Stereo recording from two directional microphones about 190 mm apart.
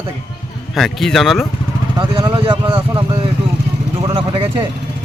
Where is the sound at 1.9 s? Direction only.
25° right (ahead or behind).